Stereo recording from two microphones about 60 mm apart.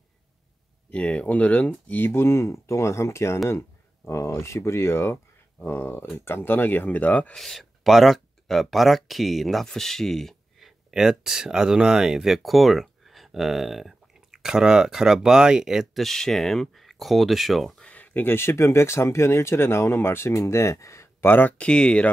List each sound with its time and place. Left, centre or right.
0.9 s speech: left
7.3 s speech: centre
10.9 s speech: centre
17.9 s speech: left
21.3 s speech: left
21.5 s speech: centre